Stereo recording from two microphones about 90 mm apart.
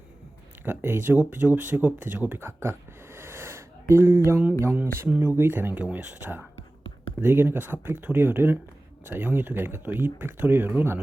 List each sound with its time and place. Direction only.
0.6 s speech: 25° right (ahead or behind)